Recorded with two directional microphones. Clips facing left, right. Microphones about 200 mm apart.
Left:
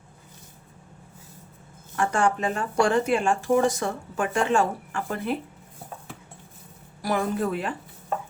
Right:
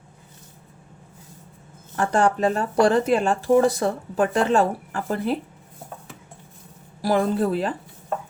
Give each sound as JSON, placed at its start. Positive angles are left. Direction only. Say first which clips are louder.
{"t": 2.0, "sound": "speech", "louder": "right 3 dB", "side_deg": -35}
{"t": 7.0, "sound": "speech", "louder": "right 5 dB", "side_deg": -30}